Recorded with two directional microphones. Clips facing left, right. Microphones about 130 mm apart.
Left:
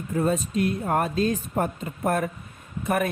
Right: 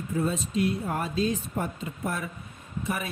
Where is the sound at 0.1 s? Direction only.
55° left (ahead or behind).